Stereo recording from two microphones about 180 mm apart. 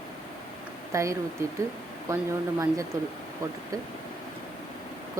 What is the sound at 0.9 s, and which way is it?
Speech, 15° right (ahead or behind).